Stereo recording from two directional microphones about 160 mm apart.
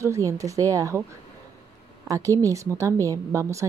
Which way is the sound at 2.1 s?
20° right (ahead or behind).